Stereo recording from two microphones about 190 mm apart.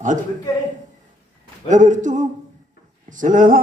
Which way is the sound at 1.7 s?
40° right (ahead or behind).